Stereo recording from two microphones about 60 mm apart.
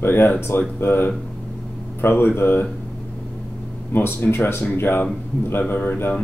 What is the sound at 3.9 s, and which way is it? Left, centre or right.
Speech, left.